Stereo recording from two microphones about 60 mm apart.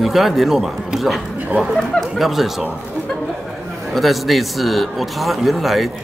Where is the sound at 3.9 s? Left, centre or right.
Centre.